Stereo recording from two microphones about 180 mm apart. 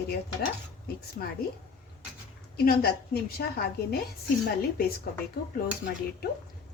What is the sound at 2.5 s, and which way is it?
A woman's voice, 60° left (ahead or behind).